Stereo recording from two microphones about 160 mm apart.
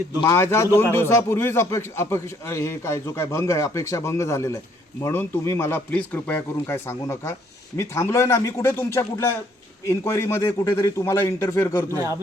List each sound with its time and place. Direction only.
0.2 s a man's voice: 20° left (ahead or behind)